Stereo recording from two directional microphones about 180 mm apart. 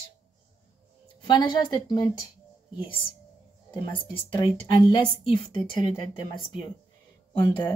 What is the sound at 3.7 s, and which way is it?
A woman's voice, 25° left (ahead or behind).